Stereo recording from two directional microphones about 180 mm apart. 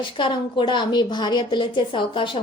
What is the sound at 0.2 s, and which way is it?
A woman's voice, 25° left (ahead or behind).